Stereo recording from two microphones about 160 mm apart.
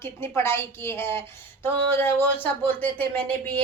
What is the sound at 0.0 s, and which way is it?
Speech, 15° left (ahead or behind).